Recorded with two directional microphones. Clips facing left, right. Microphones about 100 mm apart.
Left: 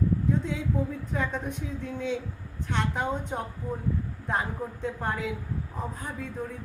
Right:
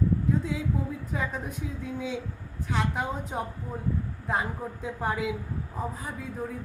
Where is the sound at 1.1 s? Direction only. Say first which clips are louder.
Left 1 dB; 5° right (ahead or behind).